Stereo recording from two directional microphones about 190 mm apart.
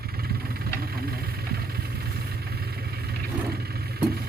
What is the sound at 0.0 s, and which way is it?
Vehicle, 55° right (ahead or behind).